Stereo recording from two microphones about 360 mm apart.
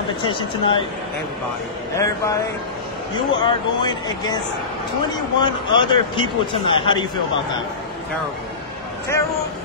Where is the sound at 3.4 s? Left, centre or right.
Centre.